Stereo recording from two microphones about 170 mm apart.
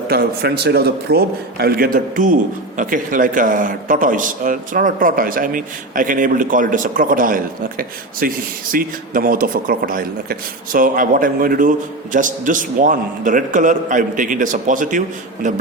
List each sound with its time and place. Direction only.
0.1 s a man's voice: 65° right (ahead or behind); by 15.6 s 45° right (ahead or behind)